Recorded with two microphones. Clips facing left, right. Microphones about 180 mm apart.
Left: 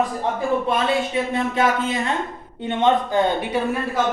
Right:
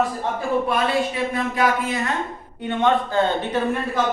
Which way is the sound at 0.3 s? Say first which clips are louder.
Even; 25° left (ahead or behind).